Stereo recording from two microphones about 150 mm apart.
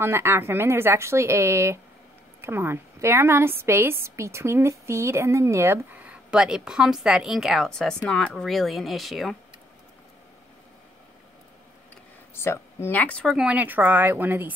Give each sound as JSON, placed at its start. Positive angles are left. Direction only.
{"t": 0.0, "sound": "a woman's voice", "side_deg": -15}
{"t": 12.4, "sound": "a woman's voice", "side_deg": 15}